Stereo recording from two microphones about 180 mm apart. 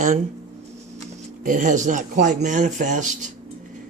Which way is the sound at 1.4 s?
45° right (ahead or behind).